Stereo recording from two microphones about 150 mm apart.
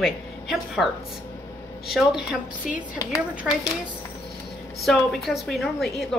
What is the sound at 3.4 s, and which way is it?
Speech, 5° right (ahead or behind).